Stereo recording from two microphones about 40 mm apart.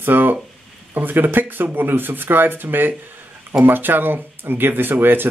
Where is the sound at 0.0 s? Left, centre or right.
Right.